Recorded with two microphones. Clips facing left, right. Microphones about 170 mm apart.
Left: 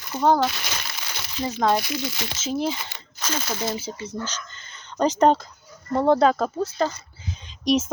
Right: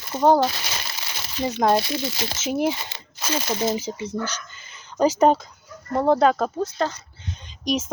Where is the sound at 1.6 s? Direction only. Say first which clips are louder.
Right 2 dB; 25° right (ahead or behind).